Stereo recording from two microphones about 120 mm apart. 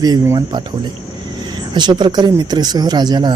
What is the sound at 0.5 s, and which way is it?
Speech, 35° right (ahead or behind).